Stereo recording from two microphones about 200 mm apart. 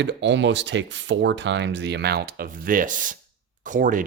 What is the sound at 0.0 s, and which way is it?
Speech, 60° right (ahead or behind).